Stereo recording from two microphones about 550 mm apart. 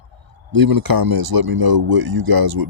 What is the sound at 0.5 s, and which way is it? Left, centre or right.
Speech, right.